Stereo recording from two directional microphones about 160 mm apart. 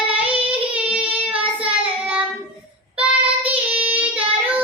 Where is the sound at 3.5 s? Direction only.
10° right (ahead or behind).